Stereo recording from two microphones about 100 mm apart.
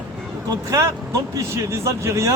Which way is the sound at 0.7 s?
30° right (ahead or behind).